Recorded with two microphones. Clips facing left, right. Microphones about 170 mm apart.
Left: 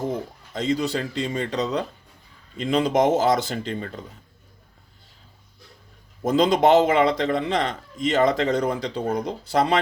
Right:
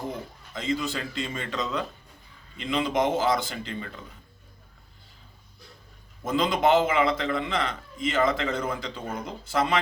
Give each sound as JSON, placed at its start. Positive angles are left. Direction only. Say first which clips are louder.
{"t": 0.1, "sound": "a man's voice", "louder": "left 7 dB", "side_deg": 40}
{"t": 6.2, "sound": "a man's voice", "louder": "left 5 dB", "side_deg": 40}